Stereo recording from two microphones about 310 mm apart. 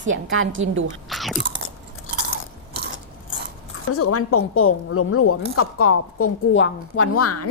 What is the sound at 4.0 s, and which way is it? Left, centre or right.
A man's voice, left.